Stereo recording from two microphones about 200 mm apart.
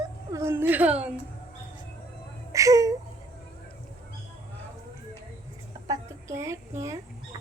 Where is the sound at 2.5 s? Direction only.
15° right (ahead or behind).